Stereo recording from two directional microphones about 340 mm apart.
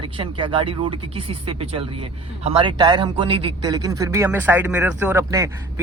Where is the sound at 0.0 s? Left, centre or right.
Centre.